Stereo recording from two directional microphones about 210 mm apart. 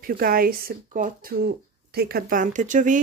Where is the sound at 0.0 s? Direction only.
45° right (ahead or behind).